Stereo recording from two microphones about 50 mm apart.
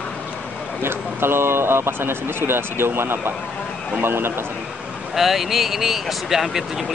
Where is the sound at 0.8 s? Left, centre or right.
Right.